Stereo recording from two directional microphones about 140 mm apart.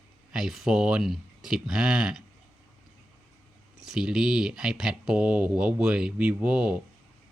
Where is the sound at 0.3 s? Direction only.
5° right (ahead or behind).